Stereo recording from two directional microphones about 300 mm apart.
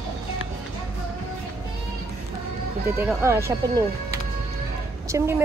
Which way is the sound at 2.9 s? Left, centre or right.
Centre.